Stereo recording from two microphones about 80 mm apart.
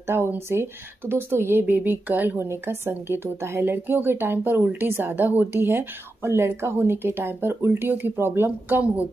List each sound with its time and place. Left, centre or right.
0.0 s speech: right